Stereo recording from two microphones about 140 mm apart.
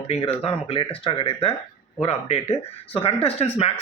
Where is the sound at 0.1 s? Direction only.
45° left (ahead or behind).